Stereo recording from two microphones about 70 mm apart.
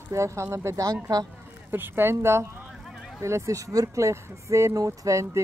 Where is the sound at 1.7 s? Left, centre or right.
Right.